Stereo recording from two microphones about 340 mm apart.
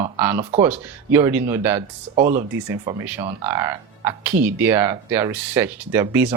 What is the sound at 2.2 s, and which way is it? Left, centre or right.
Speech, right.